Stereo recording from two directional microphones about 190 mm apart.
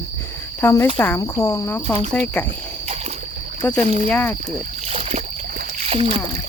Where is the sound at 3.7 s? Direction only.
45° right (ahead or behind).